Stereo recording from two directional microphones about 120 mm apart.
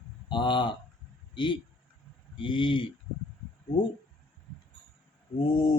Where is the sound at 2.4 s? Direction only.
45° left (ahead or behind).